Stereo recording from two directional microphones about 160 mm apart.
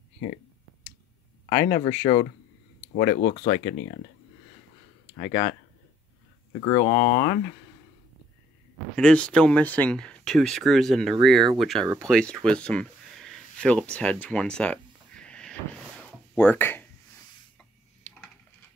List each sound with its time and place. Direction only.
1.7 s speech: 55° left (ahead or behind); by 3.6 s 75° left (ahead or behind)
5.1 s speech: 55° left (ahead or behind)
6.8 s speech: 55° left (ahead or behind)
8.9 s speech: 5° left (ahead or behind)
14.2 s a sound: 5° left (ahead or behind)